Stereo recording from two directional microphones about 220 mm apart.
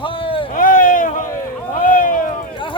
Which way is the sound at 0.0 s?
25° left (ahead or behind).